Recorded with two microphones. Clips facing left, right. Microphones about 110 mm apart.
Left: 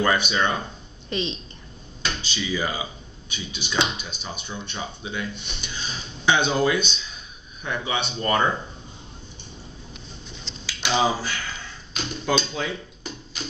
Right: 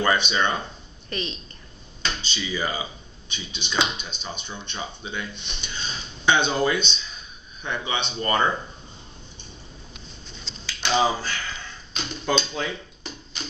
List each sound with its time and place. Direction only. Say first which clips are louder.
0.0 s speech: even; centre (ahead or behind)
1.1 s a woman's voice: left 4 dB; 20° left (ahead or behind)
2.0 s speech: left 2 dB; 5° left (ahead or behind)
10.7 s speech: even; 5° left (ahead or behind)
11.9 s typewriter: left 1 dB; 5° left (ahead or behind)